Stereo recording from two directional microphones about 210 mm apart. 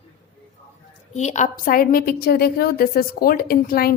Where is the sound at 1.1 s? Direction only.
35° left (ahead or behind).